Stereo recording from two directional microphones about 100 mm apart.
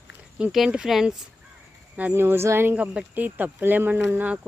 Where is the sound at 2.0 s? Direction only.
20° right (ahead or behind).